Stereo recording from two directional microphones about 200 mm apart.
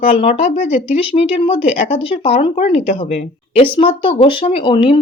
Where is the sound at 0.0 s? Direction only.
30° left (ahead or behind).